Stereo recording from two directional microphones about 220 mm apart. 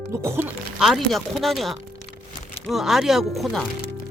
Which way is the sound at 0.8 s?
Centre (ahead or behind).